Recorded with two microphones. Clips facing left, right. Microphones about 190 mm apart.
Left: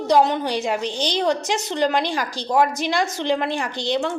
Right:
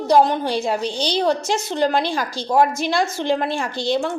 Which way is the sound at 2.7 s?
15° left (ahead or behind).